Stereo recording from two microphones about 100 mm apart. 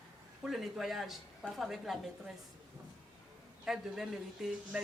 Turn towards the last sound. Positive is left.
turn(degrees=-5)  # may be behind; listen again after turning